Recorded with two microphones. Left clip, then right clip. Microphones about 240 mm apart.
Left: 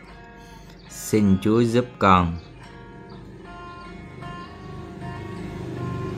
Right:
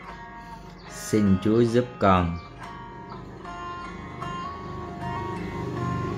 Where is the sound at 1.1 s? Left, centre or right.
Centre.